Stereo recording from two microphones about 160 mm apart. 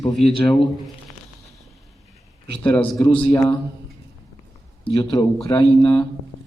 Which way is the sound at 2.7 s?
5° left (ahead or behind).